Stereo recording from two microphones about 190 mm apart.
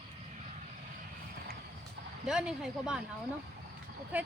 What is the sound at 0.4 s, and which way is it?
Vehicle, 40° right (ahead or behind).